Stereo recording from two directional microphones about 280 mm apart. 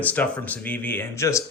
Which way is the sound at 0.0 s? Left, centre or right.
Centre.